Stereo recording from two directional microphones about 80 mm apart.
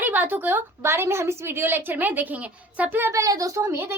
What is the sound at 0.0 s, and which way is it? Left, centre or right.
A woman's voice, right.